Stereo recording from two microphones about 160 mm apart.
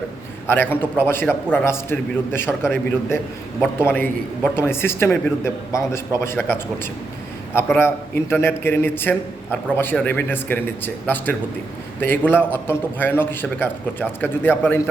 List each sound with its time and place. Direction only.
0.4 s a man's voice: 15° left (ahead or behind)